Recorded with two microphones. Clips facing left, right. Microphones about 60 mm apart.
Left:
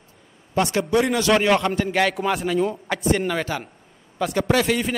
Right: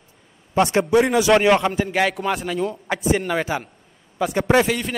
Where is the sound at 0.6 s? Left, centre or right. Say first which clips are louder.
Right 3 dB; right.